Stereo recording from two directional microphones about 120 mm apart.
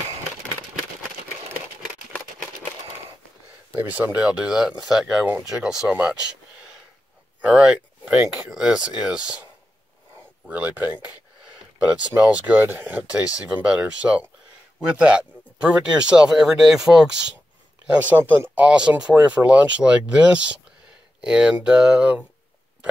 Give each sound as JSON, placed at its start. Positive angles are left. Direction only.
{"t": 3.9, "sound": "speech", "side_deg": -10}
{"t": 7.4, "sound": "speech", "side_deg": -5}
{"t": 10.5, "sound": "speech", "side_deg": -15}
{"t": 18.1, "sound": "speech", "side_deg": -15}